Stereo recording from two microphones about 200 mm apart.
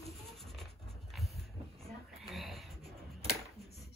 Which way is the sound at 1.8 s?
Centre (ahead or behind).